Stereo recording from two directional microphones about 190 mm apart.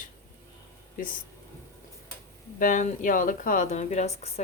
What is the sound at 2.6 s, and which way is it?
Speech, 40° left (ahead or behind).